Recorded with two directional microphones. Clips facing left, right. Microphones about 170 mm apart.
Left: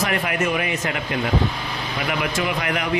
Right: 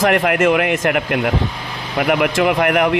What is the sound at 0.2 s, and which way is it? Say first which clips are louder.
Speech: right 8 dB; 70° right (ahead or behind).